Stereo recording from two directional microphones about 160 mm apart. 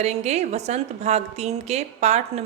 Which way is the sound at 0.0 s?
45° right (ahead or behind).